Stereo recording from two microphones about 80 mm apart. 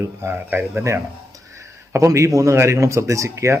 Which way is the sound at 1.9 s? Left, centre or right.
Right.